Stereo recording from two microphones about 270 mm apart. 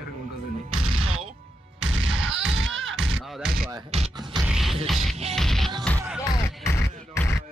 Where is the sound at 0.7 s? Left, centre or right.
Right.